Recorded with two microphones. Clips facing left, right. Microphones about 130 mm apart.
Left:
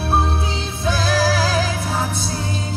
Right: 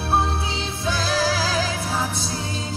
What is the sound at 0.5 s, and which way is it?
Music, 55° left (ahead or behind).